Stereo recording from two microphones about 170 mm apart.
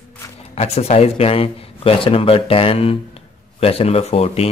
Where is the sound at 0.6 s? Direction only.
35° left (ahead or behind).